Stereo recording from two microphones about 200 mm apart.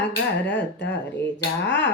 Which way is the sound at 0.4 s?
60° left (ahead or behind).